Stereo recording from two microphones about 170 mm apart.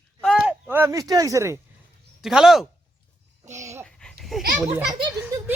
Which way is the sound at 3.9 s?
5° left (ahead or behind).